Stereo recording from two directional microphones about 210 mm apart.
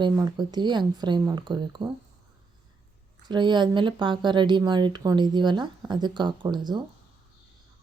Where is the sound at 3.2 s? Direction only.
20° right (ahead or behind).